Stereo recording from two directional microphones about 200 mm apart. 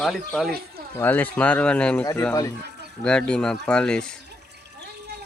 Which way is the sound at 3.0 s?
5° left (ahead or behind).